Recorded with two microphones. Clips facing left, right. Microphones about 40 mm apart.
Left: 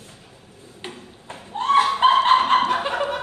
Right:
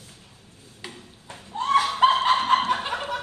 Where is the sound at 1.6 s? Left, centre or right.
Left.